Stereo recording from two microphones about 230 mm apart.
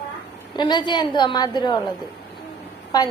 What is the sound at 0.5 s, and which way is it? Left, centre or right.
A woman's voice, centre.